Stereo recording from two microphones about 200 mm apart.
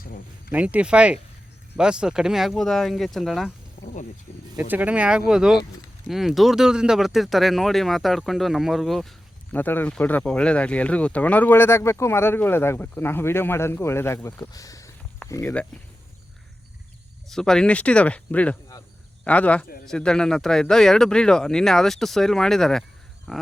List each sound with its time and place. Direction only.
0.0 s a sound: 45° left (ahead or behind)
0.5 s speech: 5° right (ahead or behind)
4.7 s speech: 5° right (ahead or behind); by 15.6 s 10° left (ahead or behind)
17.2 s speech: 5° left (ahead or behind)